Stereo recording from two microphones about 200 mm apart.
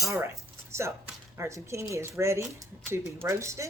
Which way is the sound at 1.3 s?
15° right (ahead or behind).